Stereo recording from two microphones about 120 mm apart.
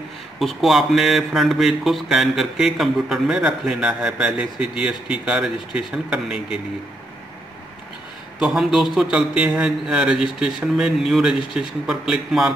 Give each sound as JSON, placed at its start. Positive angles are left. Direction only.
{"t": 0.4, "sound": "speech", "side_deg": 0}
{"t": 8.4, "sound": "speech", "side_deg": -5}